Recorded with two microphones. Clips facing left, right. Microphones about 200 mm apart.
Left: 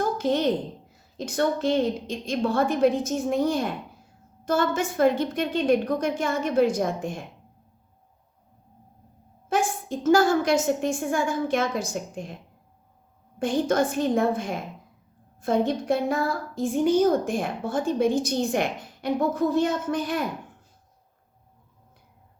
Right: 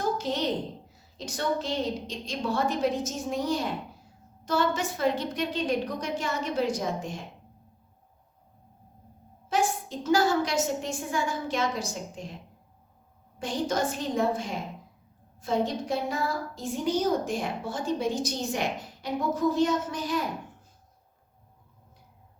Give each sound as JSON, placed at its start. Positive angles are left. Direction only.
{"t": 0.2, "sound": "a woman's voice", "side_deg": 55}
{"t": 9.5, "sound": "a woman's voice", "side_deg": 50}
{"t": 13.4, "sound": "a woman's voice", "side_deg": 55}